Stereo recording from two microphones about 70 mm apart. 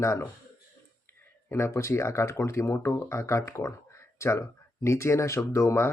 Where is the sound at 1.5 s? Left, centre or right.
Left.